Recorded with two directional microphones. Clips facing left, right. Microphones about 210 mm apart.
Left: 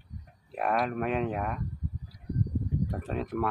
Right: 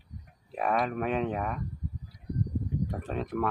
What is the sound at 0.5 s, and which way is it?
Speech, centre (ahead or behind).